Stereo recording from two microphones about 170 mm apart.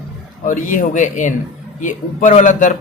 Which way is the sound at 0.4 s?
50° left (ahead or behind).